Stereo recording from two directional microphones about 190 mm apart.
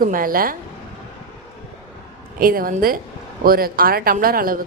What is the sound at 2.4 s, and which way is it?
Speech, 50° right (ahead or behind).